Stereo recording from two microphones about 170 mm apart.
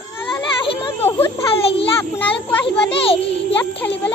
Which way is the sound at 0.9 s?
15° left (ahead or behind).